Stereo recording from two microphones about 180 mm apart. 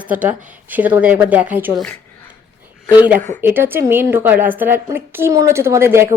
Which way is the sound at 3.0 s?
10° right (ahead or behind).